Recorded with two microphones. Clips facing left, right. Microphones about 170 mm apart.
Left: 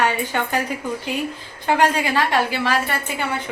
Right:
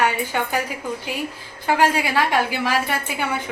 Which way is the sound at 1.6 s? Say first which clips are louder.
Left 1 dB; 10° right (ahead or behind).